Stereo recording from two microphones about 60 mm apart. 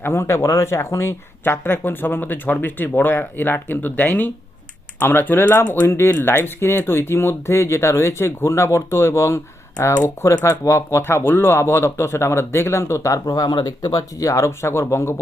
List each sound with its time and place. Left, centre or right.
0.0 s speech: left
0.3 s speech: left
13.2 s speech: left